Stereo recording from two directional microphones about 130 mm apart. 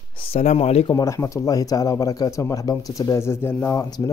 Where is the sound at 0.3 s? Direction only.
55° left (ahead or behind).